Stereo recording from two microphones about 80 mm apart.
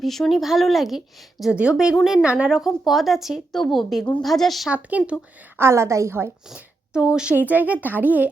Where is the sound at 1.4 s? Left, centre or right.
Centre.